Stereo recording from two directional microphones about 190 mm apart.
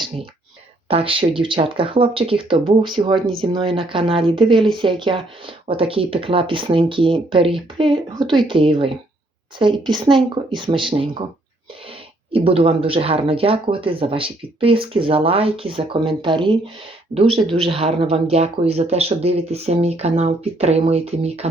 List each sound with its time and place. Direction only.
0.9 s speech: 30° right (ahead or behind)
12.3 s speech: 30° right (ahead or behind)